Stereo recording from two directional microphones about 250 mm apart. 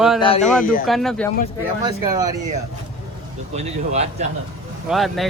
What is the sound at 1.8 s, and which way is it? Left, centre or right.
Speech, centre.